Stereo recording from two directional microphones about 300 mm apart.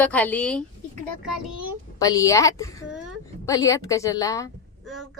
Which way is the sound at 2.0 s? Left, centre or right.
Centre.